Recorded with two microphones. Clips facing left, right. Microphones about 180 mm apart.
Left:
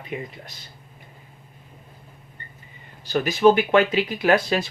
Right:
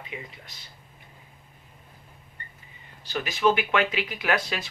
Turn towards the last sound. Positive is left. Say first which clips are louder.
# left 8 dB
turn(degrees=35)  # may be behind; listen again after turning